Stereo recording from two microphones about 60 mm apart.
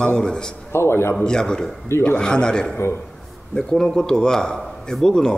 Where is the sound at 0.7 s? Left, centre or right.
Left.